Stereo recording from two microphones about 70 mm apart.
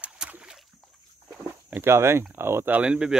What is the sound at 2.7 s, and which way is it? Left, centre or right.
Speech, centre.